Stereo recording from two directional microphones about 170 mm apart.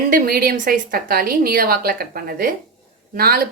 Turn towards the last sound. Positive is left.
turn(degrees=-60)  # may be behind; listen again after turning